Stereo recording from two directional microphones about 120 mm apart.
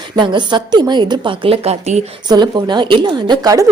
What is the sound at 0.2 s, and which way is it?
A woman's voice, 40° right (ahead or behind).